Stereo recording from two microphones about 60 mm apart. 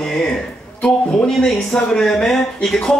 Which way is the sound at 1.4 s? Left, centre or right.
Centre.